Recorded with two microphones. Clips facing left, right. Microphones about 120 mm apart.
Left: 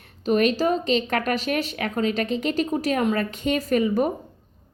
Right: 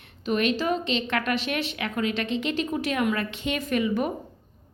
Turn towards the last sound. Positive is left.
turn(degrees=40)  # may be behind; listen again after turning